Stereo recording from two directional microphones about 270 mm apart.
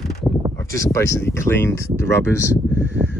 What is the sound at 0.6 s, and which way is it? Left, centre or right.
Speech, centre.